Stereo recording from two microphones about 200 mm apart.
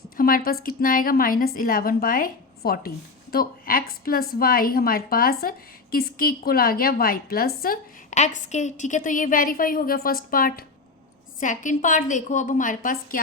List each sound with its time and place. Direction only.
0.2 s a woman's voice: 45° left (ahead or behind)